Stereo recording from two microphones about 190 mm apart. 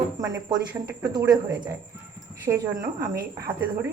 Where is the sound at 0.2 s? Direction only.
20° right (ahead or behind).